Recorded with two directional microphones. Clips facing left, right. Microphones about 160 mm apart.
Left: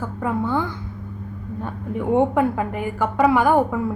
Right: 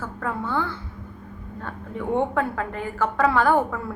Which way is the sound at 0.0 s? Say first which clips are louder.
Left 5 dB; 15° left (ahead or behind).